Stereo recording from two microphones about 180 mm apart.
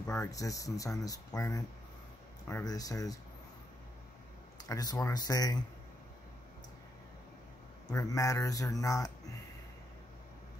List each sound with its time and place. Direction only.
0.0 s speech: 15° left (ahead or behind)
4.6 s speech: 20° left (ahead or behind)
7.9 s speech: 20° left (ahead or behind)